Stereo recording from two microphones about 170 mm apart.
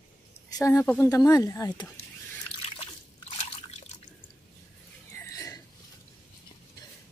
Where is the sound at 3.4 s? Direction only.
40° left (ahead or behind).